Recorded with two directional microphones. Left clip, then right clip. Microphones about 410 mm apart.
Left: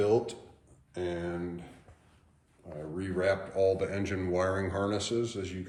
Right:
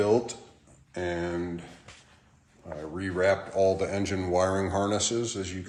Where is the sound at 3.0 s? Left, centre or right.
Centre.